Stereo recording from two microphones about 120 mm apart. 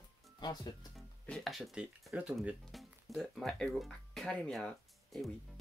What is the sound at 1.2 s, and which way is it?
Speech, 5° left (ahead or behind).